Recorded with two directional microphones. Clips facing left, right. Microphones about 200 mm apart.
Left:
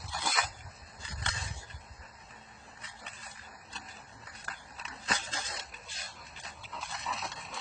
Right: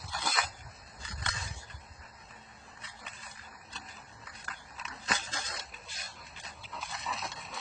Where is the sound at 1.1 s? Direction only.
30° left (ahead or behind).